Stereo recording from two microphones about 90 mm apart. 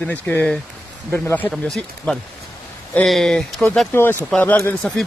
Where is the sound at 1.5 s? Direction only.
5° left (ahead or behind).